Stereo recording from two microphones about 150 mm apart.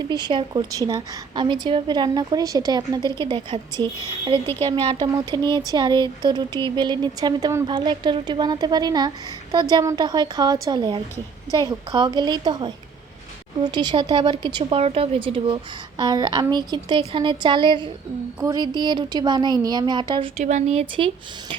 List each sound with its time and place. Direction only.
0.1 s a woman's voice: 30° right (ahead or behind)
20.4 s speech: 50° right (ahead or behind)